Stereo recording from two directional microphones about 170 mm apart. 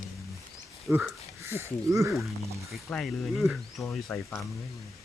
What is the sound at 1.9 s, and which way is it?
Speech, 15° right (ahead or behind).